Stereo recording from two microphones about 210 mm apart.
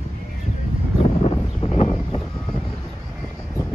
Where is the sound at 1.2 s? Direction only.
25° left (ahead or behind).